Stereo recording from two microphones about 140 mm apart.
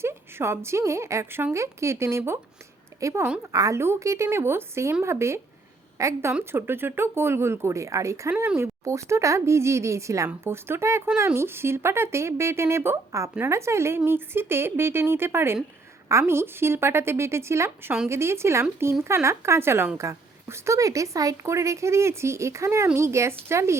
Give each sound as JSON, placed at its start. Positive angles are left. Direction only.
{"t": 0.0, "sound": "speech", "side_deg": -15}